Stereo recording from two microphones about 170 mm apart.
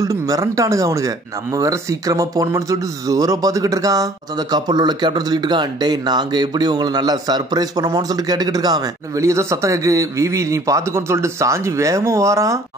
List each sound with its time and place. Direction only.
0.0 s speech: 20° right (ahead or behind)